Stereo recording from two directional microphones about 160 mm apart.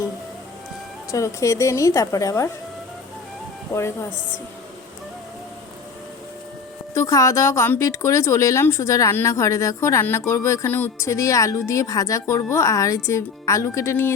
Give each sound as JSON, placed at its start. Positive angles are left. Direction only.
{"t": 1.1, "sound": "speech", "side_deg": 20}
{"t": 6.9, "sound": "speech", "side_deg": 20}